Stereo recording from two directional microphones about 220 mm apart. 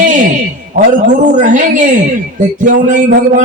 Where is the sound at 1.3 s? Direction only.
35° right (ahead or behind).